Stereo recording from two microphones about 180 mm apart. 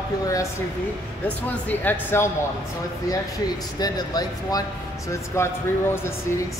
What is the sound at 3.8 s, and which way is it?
A man's voice, 20° left (ahead or behind).